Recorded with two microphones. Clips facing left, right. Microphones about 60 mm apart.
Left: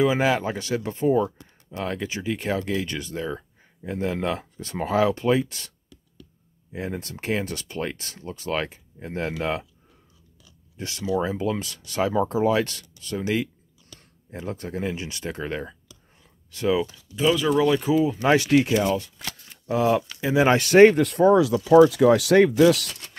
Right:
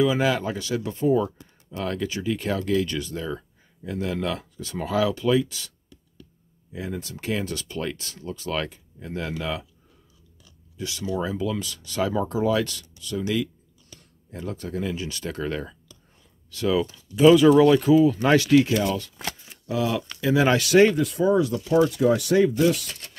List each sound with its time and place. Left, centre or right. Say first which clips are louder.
0.0 s speech: left 1 dB; left
6.7 s speech: left 1 dB; left
10.8 s speech: left 2 dB; left
17.1 s speech: right 7 dB; centre
18.0 s speech: right 1 dB; centre
19.2 s a sound: right 3 dB; centre
19.7 s speech: left 4 dB; left
20.6 s speech: left 6 dB; left
21.0 s speech: left 4 dB; left
21.9 s speech: left 3 dB; left